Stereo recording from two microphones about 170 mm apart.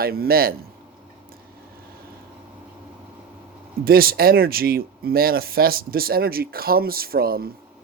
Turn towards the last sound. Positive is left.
turn(degrees=-60)  # may be behind; listen again after turning